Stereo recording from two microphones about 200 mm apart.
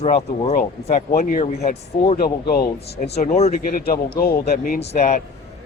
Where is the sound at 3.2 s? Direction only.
35° left (ahead or behind).